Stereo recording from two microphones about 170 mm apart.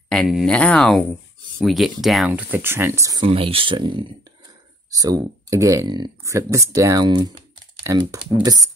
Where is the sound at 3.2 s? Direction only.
35° right (ahead or behind).